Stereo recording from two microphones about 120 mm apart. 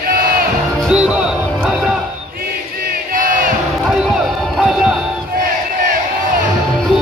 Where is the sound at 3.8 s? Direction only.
5° right (ahead or behind).